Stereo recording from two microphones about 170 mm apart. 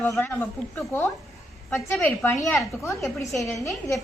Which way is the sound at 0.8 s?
10° left (ahead or behind).